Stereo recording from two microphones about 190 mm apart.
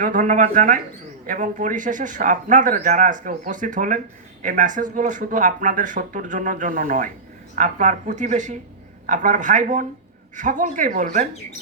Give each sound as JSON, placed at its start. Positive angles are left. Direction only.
{"t": 0.0, "sound": "speech", "side_deg": -40}